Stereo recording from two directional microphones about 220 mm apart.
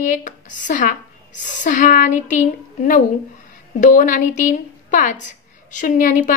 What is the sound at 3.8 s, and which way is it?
Speech, 35° left (ahead or behind).